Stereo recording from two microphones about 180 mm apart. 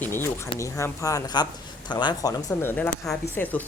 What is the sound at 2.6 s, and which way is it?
Speech, 10° left (ahead or behind).